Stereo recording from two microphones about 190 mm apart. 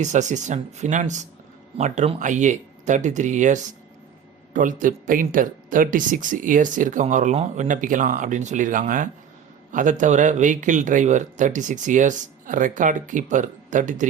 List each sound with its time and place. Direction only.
0.0 s a man's voice: 40° right (ahead or behind)